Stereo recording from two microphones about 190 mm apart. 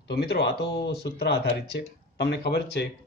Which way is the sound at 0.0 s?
60° left (ahead or behind).